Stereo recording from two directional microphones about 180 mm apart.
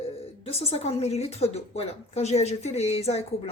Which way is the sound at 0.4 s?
35° left (ahead or behind).